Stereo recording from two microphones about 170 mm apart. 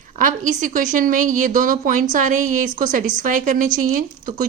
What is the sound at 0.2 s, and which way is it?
Speech, 50° right (ahead or behind).